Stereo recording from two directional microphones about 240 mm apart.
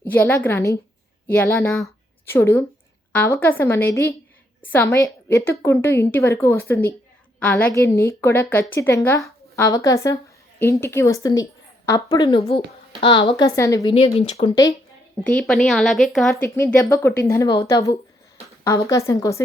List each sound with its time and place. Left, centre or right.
0.0 s a woman's voice: centre
13.9 s speech: left
15.2 s a woman's voice: centre